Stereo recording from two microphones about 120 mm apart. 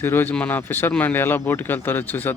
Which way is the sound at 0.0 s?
20° left (ahead or behind).